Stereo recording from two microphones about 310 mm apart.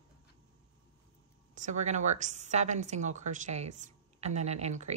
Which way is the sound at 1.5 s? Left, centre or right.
Right.